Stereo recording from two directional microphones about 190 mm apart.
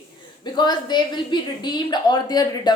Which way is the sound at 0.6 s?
25° left (ahead or behind).